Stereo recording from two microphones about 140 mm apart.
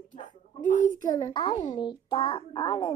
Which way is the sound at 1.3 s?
35° left (ahead or behind).